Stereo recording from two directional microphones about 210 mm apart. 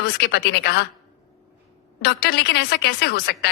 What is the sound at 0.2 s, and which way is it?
Speech, 50° left (ahead or behind).